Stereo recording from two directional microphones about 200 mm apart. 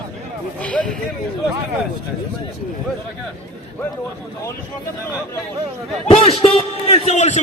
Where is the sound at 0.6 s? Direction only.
5° left (ahead or behind).